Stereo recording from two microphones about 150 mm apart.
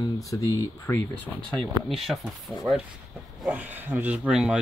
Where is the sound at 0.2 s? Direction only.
20° left (ahead or behind).